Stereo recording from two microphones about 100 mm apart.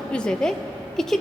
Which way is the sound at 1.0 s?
5° left (ahead or behind).